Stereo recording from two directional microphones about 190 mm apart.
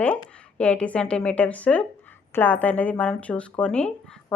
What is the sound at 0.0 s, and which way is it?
Speech, 5° left (ahead or behind).